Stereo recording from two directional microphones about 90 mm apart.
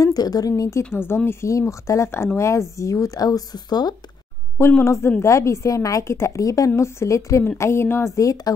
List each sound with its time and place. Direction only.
0.0 s speech: 45° left (ahead or behind)
0.9 s speech: 25° left (ahead or behind); by 3.9 s 50° left (ahead or behind)
4.6 s a woman's voice: 30° left (ahead or behind)
8.2 s speech: 40° left (ahead or behind)